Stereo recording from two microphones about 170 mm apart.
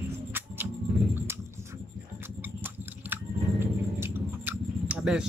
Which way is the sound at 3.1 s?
15° right (ahead or behind).